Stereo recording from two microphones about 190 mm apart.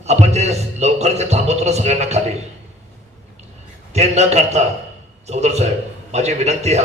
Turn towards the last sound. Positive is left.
turn(degrees=-35)  # may be behind; listen again after turning